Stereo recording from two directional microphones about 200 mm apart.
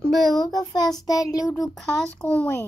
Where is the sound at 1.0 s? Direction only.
20° left (ahead or behind).